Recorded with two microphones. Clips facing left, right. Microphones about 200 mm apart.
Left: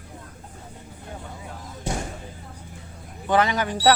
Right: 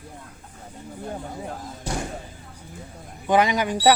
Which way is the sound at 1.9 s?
25° left (ahead or behind).